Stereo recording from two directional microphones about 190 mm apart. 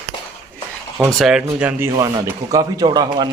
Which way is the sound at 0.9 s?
5° right (ahead or behind).